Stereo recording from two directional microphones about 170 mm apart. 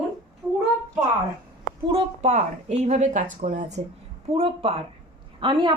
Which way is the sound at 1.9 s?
40° right (ahead or behind).